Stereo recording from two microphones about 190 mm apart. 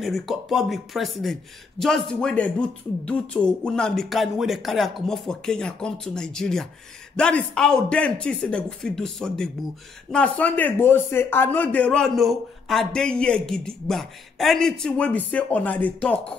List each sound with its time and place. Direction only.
0.0 s a man's voice: centre (ahead or behind)